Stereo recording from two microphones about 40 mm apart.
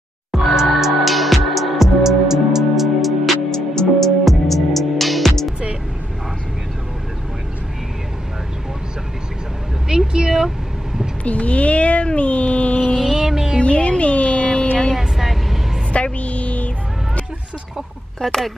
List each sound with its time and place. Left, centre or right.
0.3 s music: centre
2.7 s music: centre
3.5 s music: centre
9.8 s vehicle: centre
11.2 s a sound: left
12.9 s music: centre
13.6 s music: left
15.0 s vehicle: centre
15.9 s a sound: left
18.2 s speech: centre